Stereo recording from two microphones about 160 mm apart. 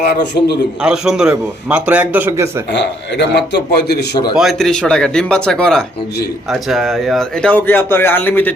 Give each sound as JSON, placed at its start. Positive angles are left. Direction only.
{"t": 0.0, "sound": "a man's voice", "side_deg": 85}
{"t": 0.8, "sound": "a man's voice", "side_deg": -5}
{"t": 2.7, "sound": "a man's voice", "side_deg": 90}
{"t": 4.4, "sound": "speech", "side_deg": 0}